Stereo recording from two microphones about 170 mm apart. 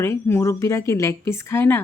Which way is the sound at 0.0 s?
15° left (ahead or behind).